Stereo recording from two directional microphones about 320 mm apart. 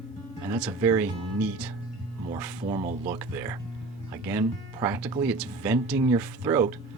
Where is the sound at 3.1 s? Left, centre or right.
Centre.